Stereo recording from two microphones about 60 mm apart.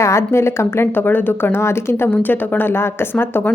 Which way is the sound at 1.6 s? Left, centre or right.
Left.